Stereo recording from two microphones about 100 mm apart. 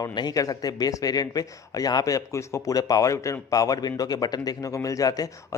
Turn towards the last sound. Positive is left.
turn(degrees=40)  # may be behind; listen again after turning